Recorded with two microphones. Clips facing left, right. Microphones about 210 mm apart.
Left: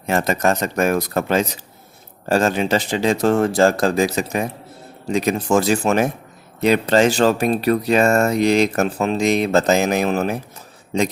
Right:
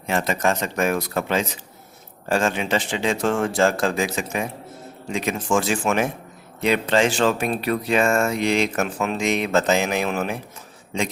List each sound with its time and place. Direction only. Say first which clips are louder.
0.0 s speech: left 3 dB; 45° left (ahead or behind)